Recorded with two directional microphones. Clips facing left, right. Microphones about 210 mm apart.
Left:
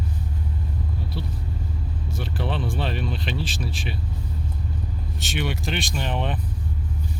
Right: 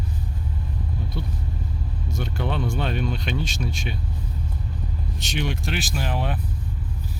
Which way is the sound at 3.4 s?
Centre (ahead or behind).